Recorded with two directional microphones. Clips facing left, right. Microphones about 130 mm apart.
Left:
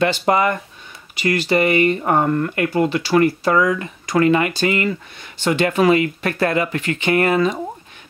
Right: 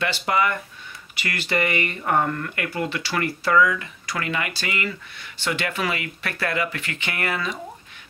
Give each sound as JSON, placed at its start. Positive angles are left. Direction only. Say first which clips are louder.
{"t": 0.0, "sound": "speech", "louder": "left 6 dB", "side_deg": 35}
{"t": 4.0, "sound": "speech", "louder": "left 15 dB", "side_deg": 40}
{"t": 5.4, "sound": "speech", "louder": "left 10 dB", "side_deg": 40}